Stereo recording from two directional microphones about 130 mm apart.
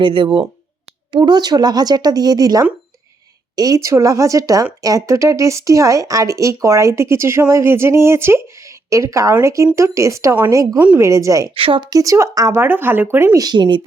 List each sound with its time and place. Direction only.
0.0 s speech: 40° right (ahead or behind)
11.5 s speech: 45° right (ahead or behind); by 12.5 s 25° right (ahead or behind)
12.5 s speech: 15° right (ahead or behind); by 13.8 s 35° right (ahead or behind)